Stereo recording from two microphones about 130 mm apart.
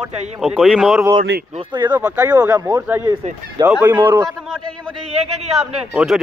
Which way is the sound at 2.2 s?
30° right (ahead or behind).